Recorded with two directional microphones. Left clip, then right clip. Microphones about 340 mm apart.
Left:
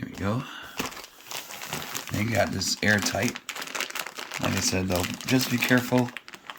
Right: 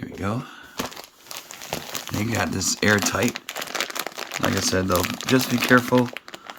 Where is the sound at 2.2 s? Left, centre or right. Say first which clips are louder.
Even; centre.